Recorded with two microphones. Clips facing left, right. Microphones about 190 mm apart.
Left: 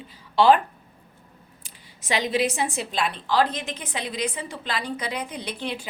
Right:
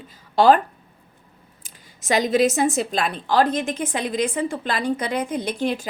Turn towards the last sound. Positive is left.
turn(degrees=-45)  # may be behind; listen again after turning